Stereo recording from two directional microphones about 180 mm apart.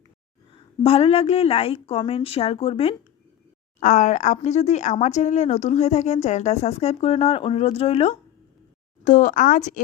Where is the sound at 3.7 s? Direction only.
40° left (ahead or behind).